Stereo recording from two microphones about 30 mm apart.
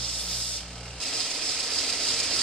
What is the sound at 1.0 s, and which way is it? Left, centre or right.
Ratchet, centre.